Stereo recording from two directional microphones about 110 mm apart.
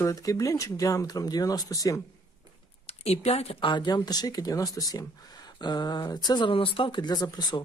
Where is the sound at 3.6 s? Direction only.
40° left (ahead or behind).